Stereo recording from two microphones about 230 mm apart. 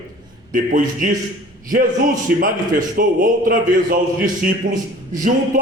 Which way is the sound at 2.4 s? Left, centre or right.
Right.